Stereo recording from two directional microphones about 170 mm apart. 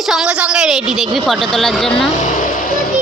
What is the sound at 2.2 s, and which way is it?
Speech, 45° left (ahead or behind).